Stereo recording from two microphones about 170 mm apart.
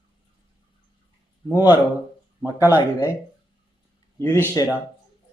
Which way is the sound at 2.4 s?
10° right (ahead or behind).